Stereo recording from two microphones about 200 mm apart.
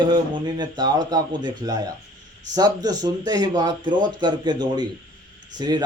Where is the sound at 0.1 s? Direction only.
20° right (ahead or behind).